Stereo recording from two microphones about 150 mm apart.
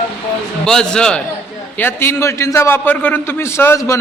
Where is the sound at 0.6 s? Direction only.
5° left (ahead or behind).